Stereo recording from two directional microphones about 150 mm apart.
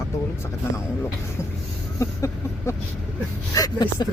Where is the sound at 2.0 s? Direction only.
20° left (ahead or behind).